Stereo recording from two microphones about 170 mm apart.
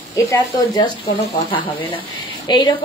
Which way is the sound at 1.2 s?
30° left (ahead or behind).